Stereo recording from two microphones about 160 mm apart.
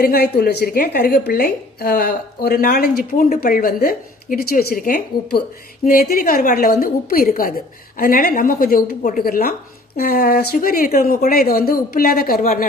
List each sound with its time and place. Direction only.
0.0 s a woman's voice: 75° left (ahead or behind)